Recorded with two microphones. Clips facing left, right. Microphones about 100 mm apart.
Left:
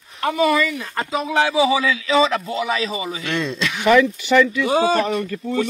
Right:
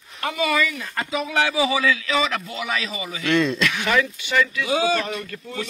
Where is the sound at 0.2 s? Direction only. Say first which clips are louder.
Left 5 dB; 30° left (ahead or behind).